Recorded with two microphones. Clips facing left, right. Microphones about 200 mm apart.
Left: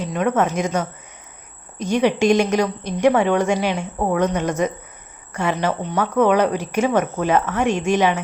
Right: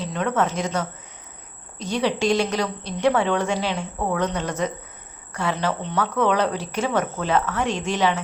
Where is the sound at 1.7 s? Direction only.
50° left (ahead or behind).